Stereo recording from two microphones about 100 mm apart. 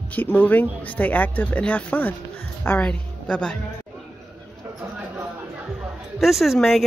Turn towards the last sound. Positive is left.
turn(degrees=0)  # may be behind; listen again after turning